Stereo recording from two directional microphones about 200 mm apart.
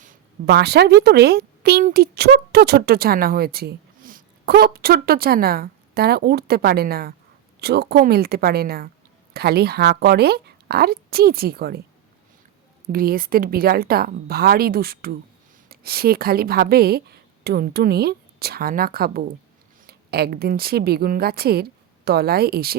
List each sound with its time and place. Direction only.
0.0 s a woman's voice: 45° right (ahead or behind)
12.9 s a woman's voice: 45° right (ahead or behind)